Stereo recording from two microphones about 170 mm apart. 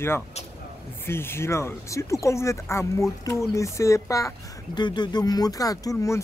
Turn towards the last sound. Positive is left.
turn(degrees=20)  # may be behind; listen again after turning